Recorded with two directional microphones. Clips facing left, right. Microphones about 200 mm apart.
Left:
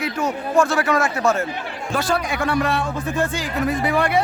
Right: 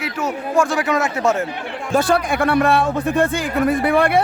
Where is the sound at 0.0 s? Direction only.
10° right (ahead or behind).